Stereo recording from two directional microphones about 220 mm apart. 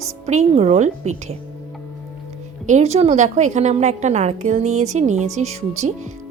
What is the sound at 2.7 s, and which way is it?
A woman's voice, 30° right (ahead or behind).